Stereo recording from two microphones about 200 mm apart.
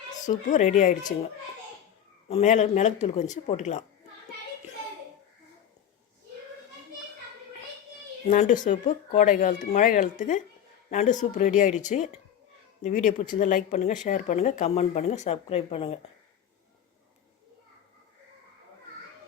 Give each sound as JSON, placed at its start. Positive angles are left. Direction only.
{"t": 0.3, "sound": "speech", "side_deg": 40}
{"t": 2.3, "sound": "speech", "side_deg": 35}
{"t": 8.3, "sound": "speech", "side_deg": 40}